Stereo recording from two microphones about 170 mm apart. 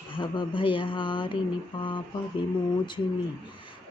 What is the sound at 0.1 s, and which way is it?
Speech, 30° left (ahead or behind).